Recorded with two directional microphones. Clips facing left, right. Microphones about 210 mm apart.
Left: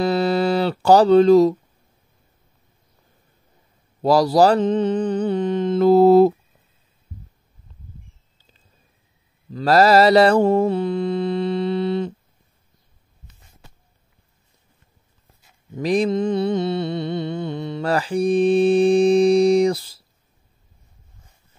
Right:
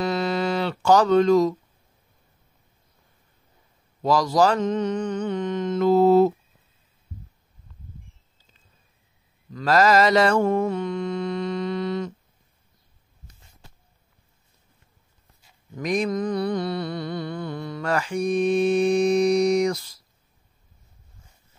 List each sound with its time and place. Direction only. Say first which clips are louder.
0.0 s speech: left 5 dB; 35° left (ahead or behind)
4.0 s mantra: left 5 dB; 35° left (ahead or behind)
9.5 s mantra: left 4 dB; 35° left (ahead or behind)
15.7 s mantra: left 5 dB; 30° left (ahead or behind)